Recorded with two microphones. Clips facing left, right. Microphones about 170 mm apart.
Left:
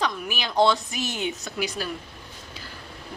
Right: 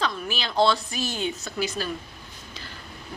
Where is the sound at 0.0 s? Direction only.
15° left (ahead or behind).